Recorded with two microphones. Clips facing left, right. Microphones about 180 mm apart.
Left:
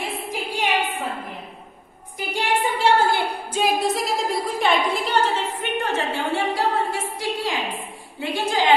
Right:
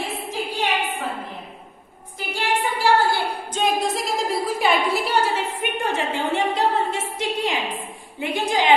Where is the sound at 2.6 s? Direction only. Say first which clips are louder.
Even; 20° left (ahead or behind).